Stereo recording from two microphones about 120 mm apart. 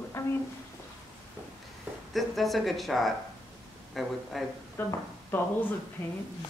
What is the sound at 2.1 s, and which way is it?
Speech, centre (ahead or behind).